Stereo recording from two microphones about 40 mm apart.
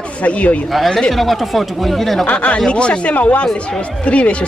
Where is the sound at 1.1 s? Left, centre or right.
Centre.